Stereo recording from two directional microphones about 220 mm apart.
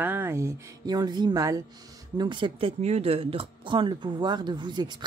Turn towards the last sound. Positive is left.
turn(degrees=-20)  # may be behind; listen again after turning